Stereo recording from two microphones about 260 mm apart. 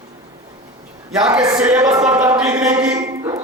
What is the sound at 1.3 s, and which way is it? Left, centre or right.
Speech, centre.